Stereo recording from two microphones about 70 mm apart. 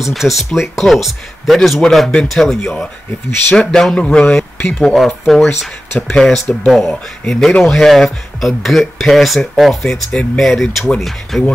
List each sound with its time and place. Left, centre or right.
0.0 s speech: centre
4.9 s speech: centre
9.8 s speech: centre